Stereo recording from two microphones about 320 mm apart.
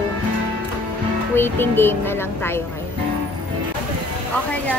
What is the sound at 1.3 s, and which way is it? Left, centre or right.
Speech, centre.